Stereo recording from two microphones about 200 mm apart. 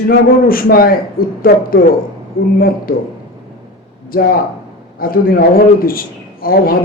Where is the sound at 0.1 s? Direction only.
45° left (ahead or behind).